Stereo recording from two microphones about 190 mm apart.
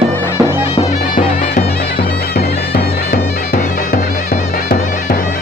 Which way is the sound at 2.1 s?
55° left (ahead or behind).